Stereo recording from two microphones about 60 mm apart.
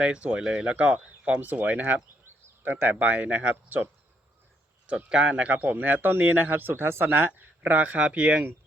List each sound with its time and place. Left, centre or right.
0.0 s speech: right
4.9 s a man's voice: centre; by 7.4 s right
7.6 s speech: right